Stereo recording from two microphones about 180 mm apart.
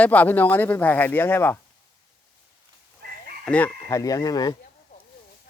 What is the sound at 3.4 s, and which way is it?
Speech, 5° left (ahead or behind).